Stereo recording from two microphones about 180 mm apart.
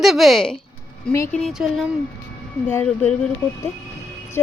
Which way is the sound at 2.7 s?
10° left (ahead or behind).